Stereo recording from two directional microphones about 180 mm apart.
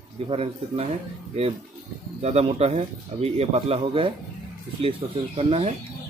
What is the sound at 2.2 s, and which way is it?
Speech, 35° right (ahead or behind).